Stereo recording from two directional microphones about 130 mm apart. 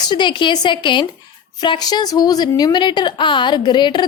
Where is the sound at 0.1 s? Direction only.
35° left (ahead or behind).